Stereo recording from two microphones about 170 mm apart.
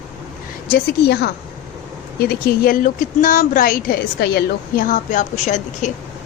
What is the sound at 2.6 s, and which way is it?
A woman's voice, 55° left (ahead or behind).